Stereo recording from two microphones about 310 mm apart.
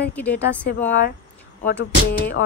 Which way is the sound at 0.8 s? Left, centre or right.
Left.